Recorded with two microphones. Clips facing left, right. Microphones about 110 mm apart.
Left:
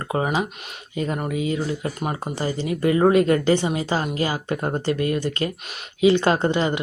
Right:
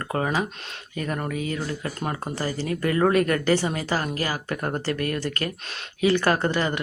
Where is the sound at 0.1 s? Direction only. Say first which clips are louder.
Left 2 dB; 15° left (ahead or behind).